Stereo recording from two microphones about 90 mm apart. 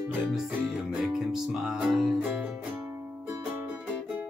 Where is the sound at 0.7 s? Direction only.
Centre (ahead or behind).